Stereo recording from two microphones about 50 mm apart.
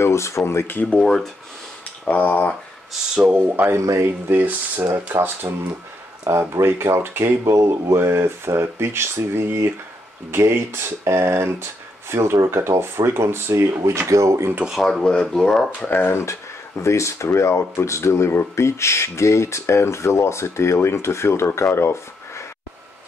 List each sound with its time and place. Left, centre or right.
0.0 s speech: left
0.9 s speech: centre
2.0 s speech: left
3.3 s speech: right
3.6 s speech: right
4.3 s speech: right
6.5 s speech: right
7.4 s speech: right
14.8 s speech: centre
16.1 s speech: left
16.8 s speech: left
21.7 s a sound: left